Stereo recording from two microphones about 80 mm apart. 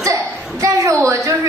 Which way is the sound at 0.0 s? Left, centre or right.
Right.